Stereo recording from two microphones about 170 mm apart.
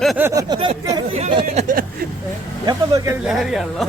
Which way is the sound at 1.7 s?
55° right (ahead or behind).